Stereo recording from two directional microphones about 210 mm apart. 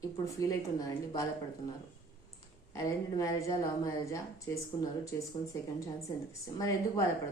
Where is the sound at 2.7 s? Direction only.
15° left (ahead or behind).